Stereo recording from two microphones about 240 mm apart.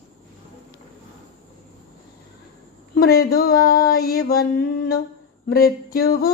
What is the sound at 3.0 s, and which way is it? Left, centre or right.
Speech, left.